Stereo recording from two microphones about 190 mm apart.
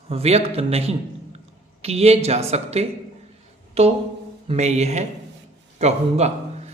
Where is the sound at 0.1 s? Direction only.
35° right (ahead or behind).